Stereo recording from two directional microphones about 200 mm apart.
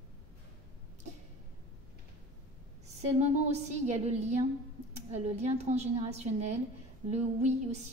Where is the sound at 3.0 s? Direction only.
35° right (ahead or behind).